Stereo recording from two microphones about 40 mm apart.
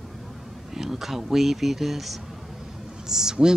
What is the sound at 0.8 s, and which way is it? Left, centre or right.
A woman's voice, centre.